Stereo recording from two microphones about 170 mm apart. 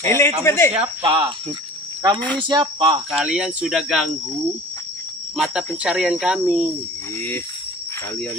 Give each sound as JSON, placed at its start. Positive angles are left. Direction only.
{"t": 0.0, "sound": "speech", "side_deg": 15}
{"t": 1.0, "sound": "speech", "side_deg": -30}
{"t": 2.4, "sound": "speech", "side_deg": -25}
{"t": 3.1, "sound": "speech", "side_deg": -5}
{"t": 5.3, "sound": "speech", "side_deg": -5}